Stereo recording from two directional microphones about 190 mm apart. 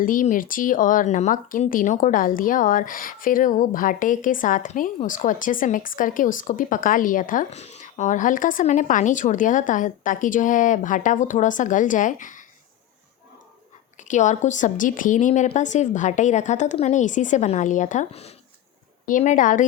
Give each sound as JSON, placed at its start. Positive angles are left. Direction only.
{"t": 0.0, "sound": "speech", "side_deg": 45}
{"t": 14.1, "sound": "a woman's voice", "side_deg": 40}